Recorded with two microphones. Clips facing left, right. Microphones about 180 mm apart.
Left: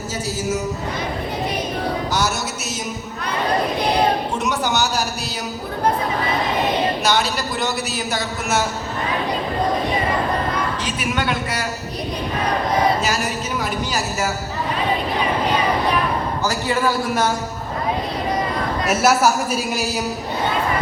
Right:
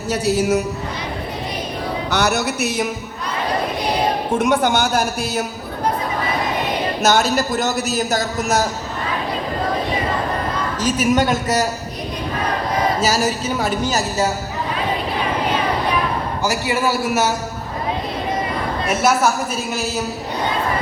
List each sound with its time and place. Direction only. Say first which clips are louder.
0.1 s a man's voice: right 7 dB; 70° right (ahead or behind)
2.0 s music: right 4 dB; 65° right (ahead or behind)
4.3 s a man's voice: right 5 dB; 50° right (ahead or behind)
7.0 s a man's voice: right 4 dB; 45° right (ahead or behind)
10.8 s a woman's voice: right 6 dB; 40° right (ahead or behind)
16.4 s a man's voice: right 2 dB; 10° right (ahead or behind)
18.9 s a woman's voice: left 1 dB; 10° left (ahead or behind)